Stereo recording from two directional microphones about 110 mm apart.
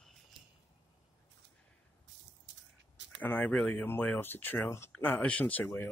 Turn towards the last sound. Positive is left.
turn(degrees=20)  # may be behind; listen again after turning